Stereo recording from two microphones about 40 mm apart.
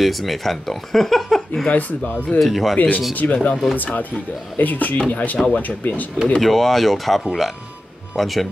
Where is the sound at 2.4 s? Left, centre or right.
Centre.